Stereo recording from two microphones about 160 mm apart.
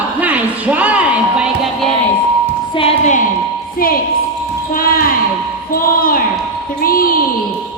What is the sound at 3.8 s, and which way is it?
Speech, 65° left (ahead or behind).